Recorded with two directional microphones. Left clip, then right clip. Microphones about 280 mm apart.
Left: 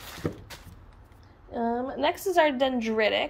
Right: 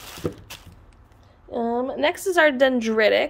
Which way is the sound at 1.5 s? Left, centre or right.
Centre.